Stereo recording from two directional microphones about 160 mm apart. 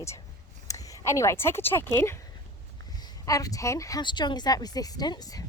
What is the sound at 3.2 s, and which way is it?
Speech, 20° left (ahead or behind).